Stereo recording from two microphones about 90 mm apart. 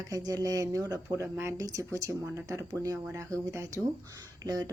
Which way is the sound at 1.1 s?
25° right (ahead or behind).